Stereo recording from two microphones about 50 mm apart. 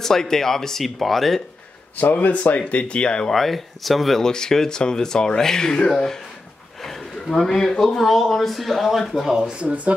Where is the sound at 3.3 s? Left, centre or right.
Centre.